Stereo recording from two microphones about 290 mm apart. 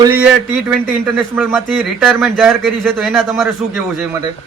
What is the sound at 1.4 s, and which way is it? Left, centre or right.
Speech, centre.